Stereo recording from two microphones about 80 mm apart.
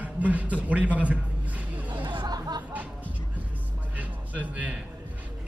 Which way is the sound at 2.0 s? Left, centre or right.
Right.